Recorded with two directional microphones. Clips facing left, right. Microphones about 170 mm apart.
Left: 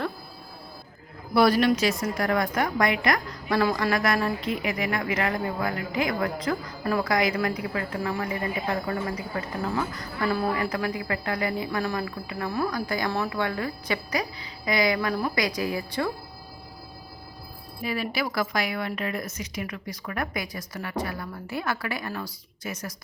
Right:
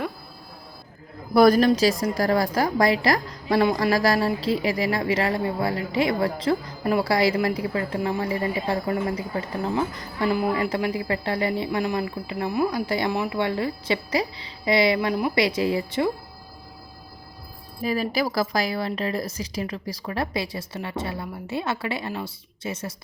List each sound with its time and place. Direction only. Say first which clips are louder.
1.3 s a woman's voice: right 4 dB; 45° right (ahead or behind); by 16.1 s 20° right (ahead or behind)
17.8 s a woman's voice: right 5 dB; 40° right (ahead or behind)